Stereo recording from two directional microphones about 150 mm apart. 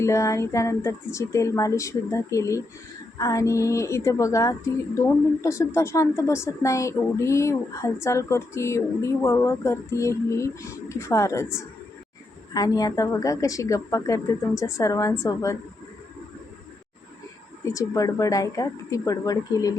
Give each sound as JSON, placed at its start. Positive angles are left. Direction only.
{"t": 0.0, "sound": "a woman's voice", "side_deg": 20}
{"t": 12.5, "sound": "a woman's voice", "side_deg": 25}
{"t": 17.7, "sound": "a woman's voice", "side_deg": 25}